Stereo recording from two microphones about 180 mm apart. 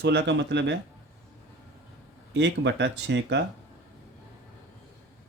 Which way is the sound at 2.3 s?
75° right (ahead or behind).